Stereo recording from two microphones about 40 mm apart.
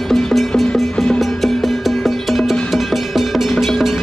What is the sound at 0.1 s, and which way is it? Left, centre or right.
Music, centre.